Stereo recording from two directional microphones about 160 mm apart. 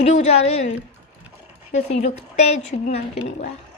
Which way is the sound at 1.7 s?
45° left (ahead or behind).